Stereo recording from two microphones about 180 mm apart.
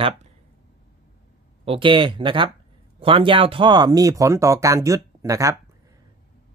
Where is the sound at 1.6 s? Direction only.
30° right (ahead or behind).